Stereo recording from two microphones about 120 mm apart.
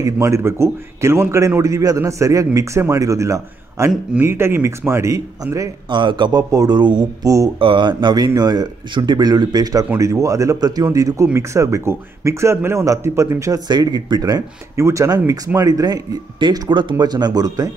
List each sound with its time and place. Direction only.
0.0 s a man's voice: 25° right (ahead or behind)
5.9 s speech: 40° right (ahead or behind)
7.5 s a man's voice: 45° right (ahead or behind); by 13.6 s 25° right (ahead or behind)
13.7 s speech: 40° right (ahead or behind)